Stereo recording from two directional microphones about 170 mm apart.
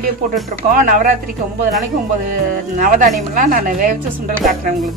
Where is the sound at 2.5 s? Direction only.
50° right (ahead or behind).